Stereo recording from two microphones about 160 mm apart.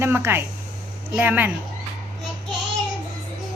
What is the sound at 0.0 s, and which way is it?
A woman's voice, 15° right (ahead or behind).